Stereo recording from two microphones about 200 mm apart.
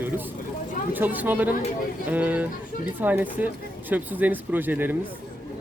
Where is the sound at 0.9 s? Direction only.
10° right (ahead or behind).